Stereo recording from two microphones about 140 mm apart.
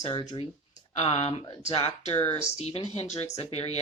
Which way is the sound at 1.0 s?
45° left (ahead or behind).